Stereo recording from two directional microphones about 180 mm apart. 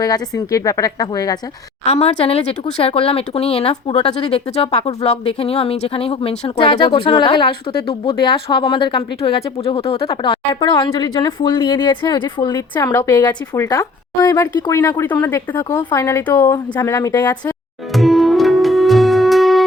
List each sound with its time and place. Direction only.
0.0 s a woman's voice: 20° left (ahead or behind)
1.8 s speech: 35° left (ahead or behind)
12.9 s a woman's voice: 10° left (ahead or behind)
13.1 s a woman's voice: 25° left (ahead or behind)
17.9 s music: centre (ahead or behind)